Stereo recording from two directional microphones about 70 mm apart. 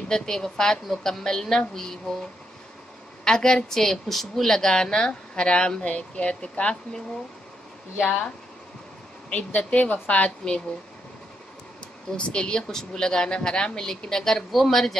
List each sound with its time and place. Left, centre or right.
0.1 s a woman's voice: centre
3.3 s a woman's voice: centre
8.0 s a woman's voice: left
9.3 s a woman's voice: left
12.2 s a woman's voice: centre